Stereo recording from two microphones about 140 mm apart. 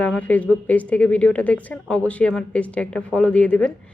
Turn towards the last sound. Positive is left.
turn(degrees=10)  # may be behind; listen again after turning